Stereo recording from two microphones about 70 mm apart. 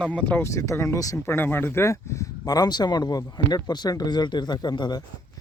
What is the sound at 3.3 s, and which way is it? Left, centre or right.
Speech, left.